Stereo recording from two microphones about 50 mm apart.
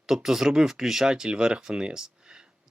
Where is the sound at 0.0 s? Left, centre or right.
Centre.